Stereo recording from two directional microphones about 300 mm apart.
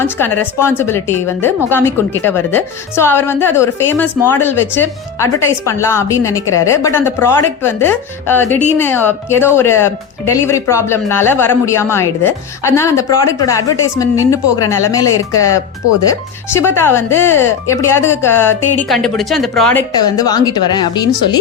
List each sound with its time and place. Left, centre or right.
0.0 s speech: centre